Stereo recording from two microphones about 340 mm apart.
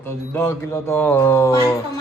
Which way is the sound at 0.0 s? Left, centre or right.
Centre.